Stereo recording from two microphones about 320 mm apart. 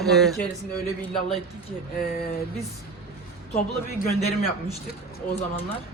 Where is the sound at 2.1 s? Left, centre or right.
Left.